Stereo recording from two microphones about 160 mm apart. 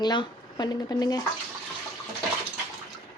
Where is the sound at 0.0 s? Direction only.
25° left (ahead or behind).